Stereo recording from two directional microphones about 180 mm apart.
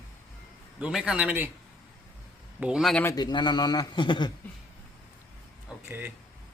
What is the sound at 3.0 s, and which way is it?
A man's voice, 20° left (ahead or behind).